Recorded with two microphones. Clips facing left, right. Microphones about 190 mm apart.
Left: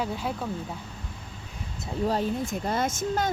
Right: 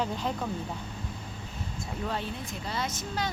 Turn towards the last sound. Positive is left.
turn(degrees=50)  # may be behind; listen again after turning